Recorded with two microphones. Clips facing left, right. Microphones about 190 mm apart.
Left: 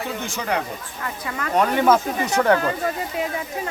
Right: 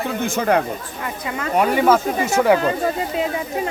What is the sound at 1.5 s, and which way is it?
Speech, 10° right (ahead or behind).